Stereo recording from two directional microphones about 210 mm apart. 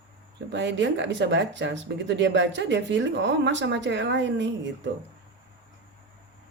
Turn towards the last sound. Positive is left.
turn(degrees=-60)  # may be behind; listen again after turning